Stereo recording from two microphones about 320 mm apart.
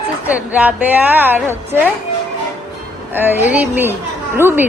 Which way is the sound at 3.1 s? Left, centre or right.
Centre.